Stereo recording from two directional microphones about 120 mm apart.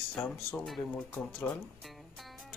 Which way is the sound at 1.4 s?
15° left (ahead or behind).